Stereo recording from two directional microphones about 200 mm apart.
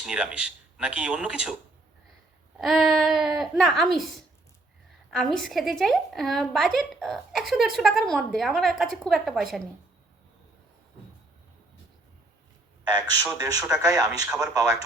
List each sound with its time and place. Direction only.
0.0 s a woman's voice: 5° right (ahead or behind)
2.6 s a woman's voice: centre (ahead or behind)
5.1 s a woman's voice: centre (ahead or behind)
12.9 s a man's voice: 15° right (ahead or behind)
14.3 s a woman's voice: 5° right (ahead or behind)
14.5 s a man's voice: 15° right (ahead or behind)